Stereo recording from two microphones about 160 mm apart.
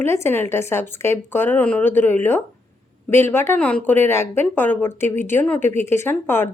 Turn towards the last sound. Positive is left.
turn(degrees=15)  # may be behind; listen again after turning